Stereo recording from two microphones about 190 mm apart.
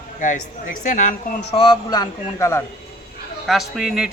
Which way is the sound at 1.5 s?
25° left (ahead or behind).